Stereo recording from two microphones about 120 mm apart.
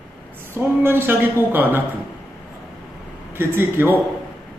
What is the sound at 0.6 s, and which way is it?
Speech, 15° right (ahead or behind).